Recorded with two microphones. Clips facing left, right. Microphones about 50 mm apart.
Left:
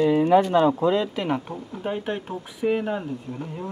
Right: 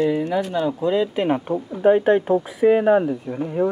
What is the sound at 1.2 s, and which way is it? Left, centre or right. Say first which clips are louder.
Speech: right 5 dB; right.